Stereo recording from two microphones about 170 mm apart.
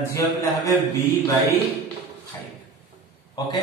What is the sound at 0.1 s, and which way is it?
A man's voice, 20° left (ahead or behind).